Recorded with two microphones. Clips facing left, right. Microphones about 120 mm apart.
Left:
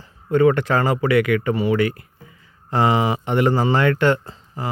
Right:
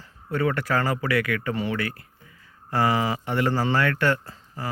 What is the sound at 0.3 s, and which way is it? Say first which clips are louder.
Speech: left 8 dB; 20° left (ahead or behind).